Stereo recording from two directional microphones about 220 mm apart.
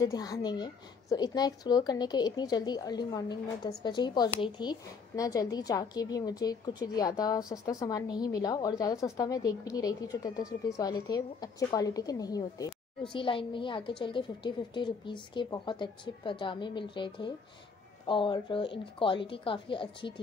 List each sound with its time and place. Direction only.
0.0 s a woman's voice: 15° left (ahead or behind)